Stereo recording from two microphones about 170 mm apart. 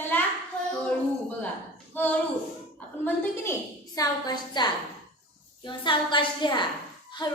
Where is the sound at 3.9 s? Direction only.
20° left (ahead or behind).